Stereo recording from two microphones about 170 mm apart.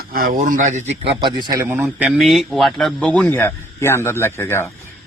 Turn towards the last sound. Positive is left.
turn(degrees=15)  # may be behind; listen again after turning